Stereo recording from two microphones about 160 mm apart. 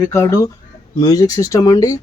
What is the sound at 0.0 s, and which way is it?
Speech, 20° left (ahead or behind).